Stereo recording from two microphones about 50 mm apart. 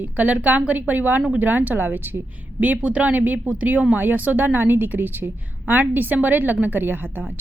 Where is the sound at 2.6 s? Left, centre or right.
Right.